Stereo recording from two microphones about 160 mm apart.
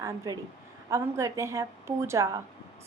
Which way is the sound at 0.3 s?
20° right (ahead or behind).